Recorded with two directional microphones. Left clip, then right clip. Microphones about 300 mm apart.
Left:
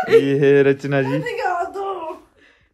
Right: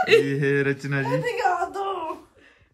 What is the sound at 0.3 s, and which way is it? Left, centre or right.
Speech, centre.